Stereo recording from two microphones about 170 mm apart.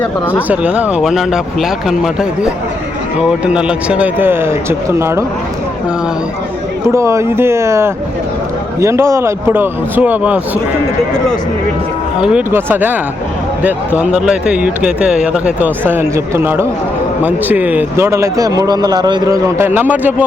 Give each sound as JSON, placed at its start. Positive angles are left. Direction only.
{"t": 0.0, "sound": "speech", "side_deg": 10}
{"t": 0.4, "sound": "speech", "side_deg": -10}
{"t": 3.2, "sound": "speech", "side_deg": -5}
{"t": 6.8, "sound": "speech", "side_deg": -15}
{"t": 12.2, "sound": "speech", "side_deg": -10}